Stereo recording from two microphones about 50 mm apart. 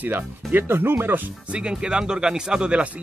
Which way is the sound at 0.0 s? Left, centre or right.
Right.